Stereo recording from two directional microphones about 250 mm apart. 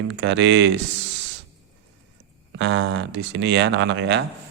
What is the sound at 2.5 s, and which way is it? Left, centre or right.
A man's voice, right.